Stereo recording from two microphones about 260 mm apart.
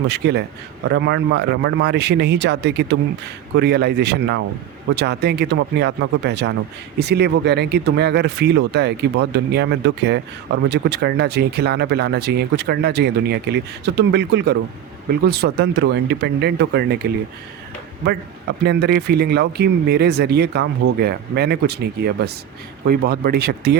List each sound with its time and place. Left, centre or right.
0.1 s speech: right
18.6 s speech: right